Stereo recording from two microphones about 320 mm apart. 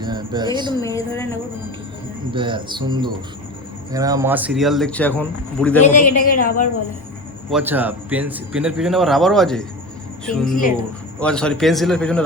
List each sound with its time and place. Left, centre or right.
0.0 s speech: centre
0.8 s a woman's voice: centre
2.3 s a man's voice: centre
6.3 s a woman's voice: left
7.5 s a man's voice: centre